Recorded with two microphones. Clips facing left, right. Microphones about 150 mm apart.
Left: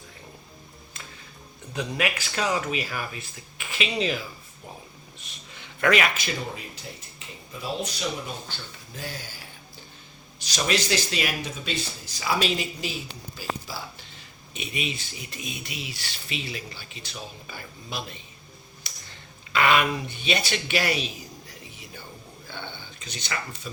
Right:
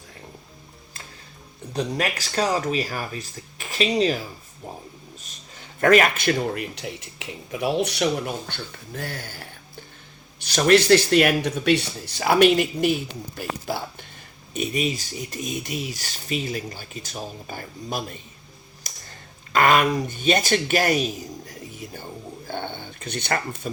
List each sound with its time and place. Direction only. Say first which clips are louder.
1.7 s speech: right 3 dB; 35° right (ahead or behind)
5.2 s speech: right 1 dB; 45° right (ahead or behind); by 13.8 s 60° right (ahead or behind)
14.5 s speech: right 8 dB; 45° right (ahead or behind)
18.8 s a sound: right 3 dB; 45° right (ahead or behind)
19.5 s speech: right 4 dB; 45° right (ahead or behind)